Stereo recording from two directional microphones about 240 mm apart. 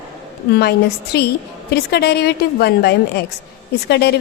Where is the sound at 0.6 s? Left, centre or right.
Left.